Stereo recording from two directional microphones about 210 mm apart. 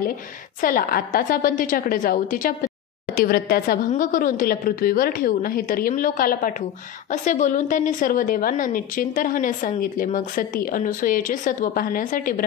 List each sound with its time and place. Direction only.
0.6 s a woman's voice: 40° left (ahead or behind)